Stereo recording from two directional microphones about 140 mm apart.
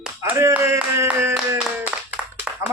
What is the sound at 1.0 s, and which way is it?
Speech, 10° right (ahead or behind).